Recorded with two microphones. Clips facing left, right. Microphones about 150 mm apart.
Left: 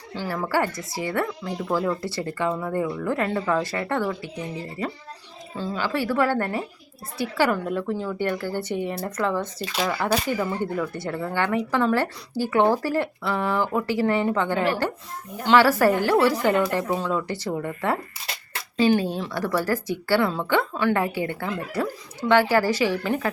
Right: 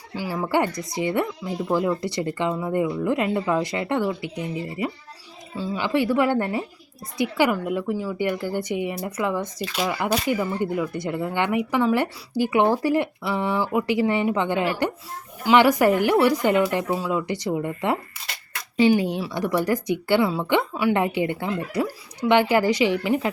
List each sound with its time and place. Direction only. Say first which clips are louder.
0.2 s a woman's voice: right 2 dB; 10° right (ahead or behind)